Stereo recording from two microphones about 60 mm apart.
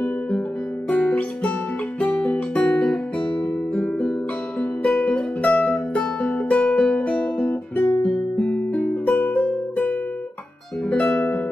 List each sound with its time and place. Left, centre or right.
0.8 s guitar: left
2.0 s music: centre
2.3 s guitar: centre
3.7 s music: centre
7.0 s guitar: left
7.9 s music: left
11.1 s music: left